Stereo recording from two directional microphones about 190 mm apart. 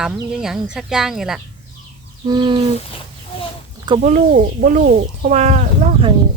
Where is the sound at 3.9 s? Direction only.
25° right (ahead or behind).